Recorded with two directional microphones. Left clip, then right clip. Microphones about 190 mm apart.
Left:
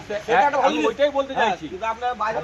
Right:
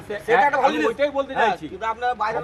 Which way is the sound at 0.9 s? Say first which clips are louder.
Left 1 dB; 30° right (ahead or behind).